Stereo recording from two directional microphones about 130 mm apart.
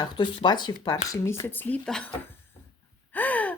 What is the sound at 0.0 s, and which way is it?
Speech, 35° left (ahead or behind).